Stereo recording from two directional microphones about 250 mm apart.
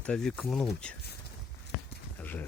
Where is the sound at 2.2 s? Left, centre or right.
Centre.